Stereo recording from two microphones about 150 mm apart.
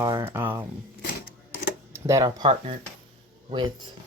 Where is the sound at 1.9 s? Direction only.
20° right (ahead or behind).